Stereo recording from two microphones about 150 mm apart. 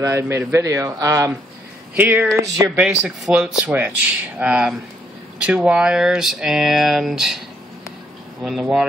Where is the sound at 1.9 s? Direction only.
10° right (ahead or behind).